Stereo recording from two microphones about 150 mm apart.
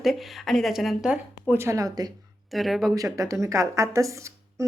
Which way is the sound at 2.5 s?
Centre (ahead or behind).